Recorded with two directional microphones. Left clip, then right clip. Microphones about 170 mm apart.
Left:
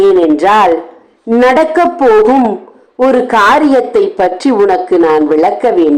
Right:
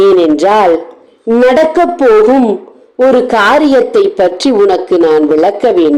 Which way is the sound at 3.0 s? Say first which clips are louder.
Even; 10° right (ahead or behind).